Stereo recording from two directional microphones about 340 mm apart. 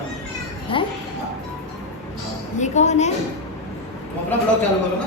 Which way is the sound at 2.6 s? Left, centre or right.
Left.